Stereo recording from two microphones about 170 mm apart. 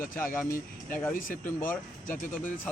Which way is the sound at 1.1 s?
55° left (ahead or behind).